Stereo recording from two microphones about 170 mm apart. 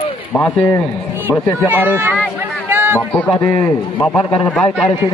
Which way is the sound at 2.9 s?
5° left (ahead or behind).